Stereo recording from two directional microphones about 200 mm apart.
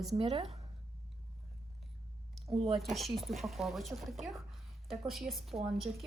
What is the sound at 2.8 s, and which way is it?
A woman's voice, centre (ahead or behind).